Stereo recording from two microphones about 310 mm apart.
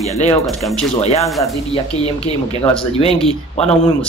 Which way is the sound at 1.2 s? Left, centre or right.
Centre.